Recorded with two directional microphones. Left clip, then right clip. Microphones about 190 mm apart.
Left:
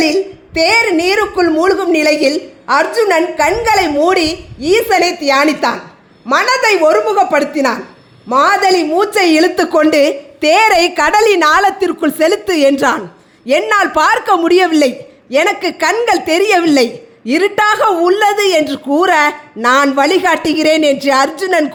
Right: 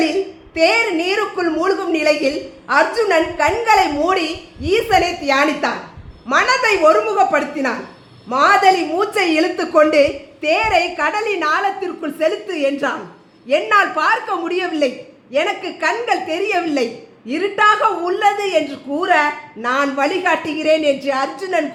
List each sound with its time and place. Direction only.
0.0 s a woman's voice: 40° left (ahead or behind)